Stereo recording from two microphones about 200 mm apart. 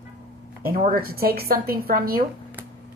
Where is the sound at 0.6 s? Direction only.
45° right (ahead or behind).